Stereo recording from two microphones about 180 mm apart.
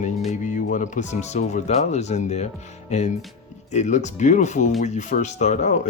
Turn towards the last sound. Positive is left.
turn(degrees=40)  # may be behind; listen again after turning